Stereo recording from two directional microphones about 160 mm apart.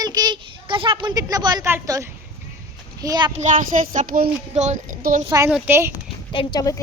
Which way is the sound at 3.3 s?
50° right (ahead or behind).